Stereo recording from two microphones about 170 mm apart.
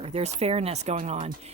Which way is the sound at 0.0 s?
40° right (ahead or behind).